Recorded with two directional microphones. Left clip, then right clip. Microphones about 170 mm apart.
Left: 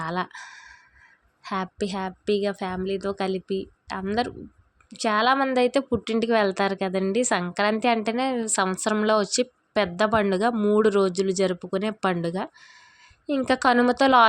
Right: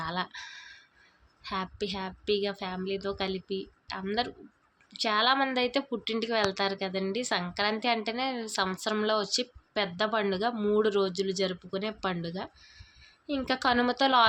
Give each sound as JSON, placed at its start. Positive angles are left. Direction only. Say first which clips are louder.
{"t": 0.0, "sound": "speech", "louder": "left 5 dB", "side_deg": 40}